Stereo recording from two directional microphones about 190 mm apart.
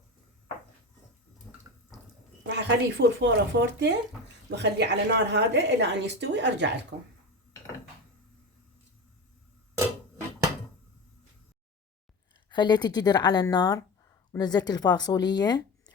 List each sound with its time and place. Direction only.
1.5 s water: 5° left (ahead or behind)
2.5 s a woman's voice: 65° right (ahead or behind)
12.5 s a woman's voice: 25° left (ahead or behind)